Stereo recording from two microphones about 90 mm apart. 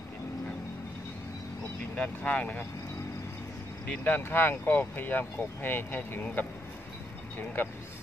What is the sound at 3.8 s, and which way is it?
Speech, 25° left (ahead or behind).